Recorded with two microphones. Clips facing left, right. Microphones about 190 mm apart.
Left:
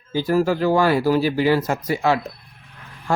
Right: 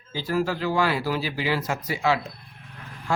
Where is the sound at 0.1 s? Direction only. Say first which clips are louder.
Left 7 dB; 45° left (ahead or behind).